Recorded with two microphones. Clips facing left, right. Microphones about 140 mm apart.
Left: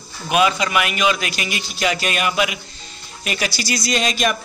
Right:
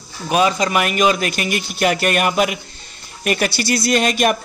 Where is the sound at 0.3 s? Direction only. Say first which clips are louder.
Right 1 dB; 35° right (ahead or behind).